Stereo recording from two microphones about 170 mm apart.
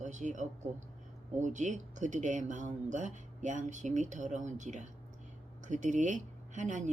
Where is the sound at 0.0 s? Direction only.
45° right (ahead or behind).